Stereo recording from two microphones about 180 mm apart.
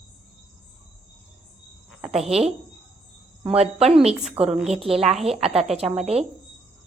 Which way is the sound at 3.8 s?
35° right (ahead or behind).